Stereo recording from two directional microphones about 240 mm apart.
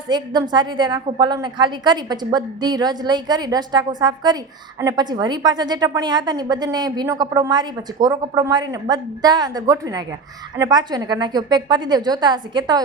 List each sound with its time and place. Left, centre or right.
0.1 s a woman's voice: centre